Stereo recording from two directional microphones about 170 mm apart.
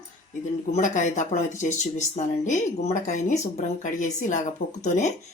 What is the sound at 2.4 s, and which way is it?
Mantra, 45° left (ahead or behind).